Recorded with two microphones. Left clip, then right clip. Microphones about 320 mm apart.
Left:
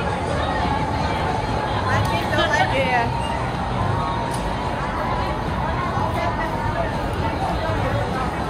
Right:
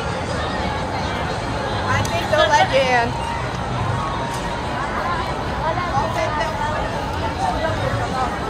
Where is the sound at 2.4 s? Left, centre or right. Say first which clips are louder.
Right 5 dB; centre.